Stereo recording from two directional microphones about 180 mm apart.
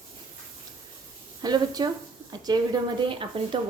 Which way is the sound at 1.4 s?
25° right (ahead or behind).